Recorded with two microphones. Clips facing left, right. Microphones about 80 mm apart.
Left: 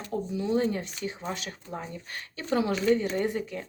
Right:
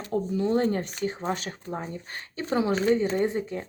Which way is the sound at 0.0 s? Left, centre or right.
Right.